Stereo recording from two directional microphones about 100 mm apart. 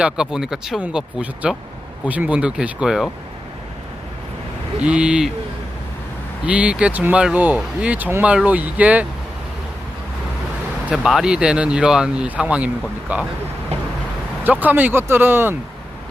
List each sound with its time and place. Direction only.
0.0 s speech: 5° right (ahead or behind)
4.8 s speech: 10° right (ahead or behind)
6.4 s speech: 15° right (ahead or behind)
10.8 s speech: 5° right (ahead or behind)
14.4 s speech: 20° right (ahead or behind)